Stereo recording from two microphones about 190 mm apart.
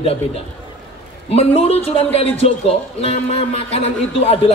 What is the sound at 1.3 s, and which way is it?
Speech, 30° left (ahead or behind).